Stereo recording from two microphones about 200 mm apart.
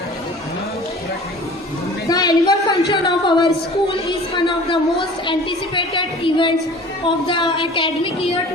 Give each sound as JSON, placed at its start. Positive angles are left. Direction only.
{"t": 2.0, "sound": "a woman's voice", "side_deg": 20}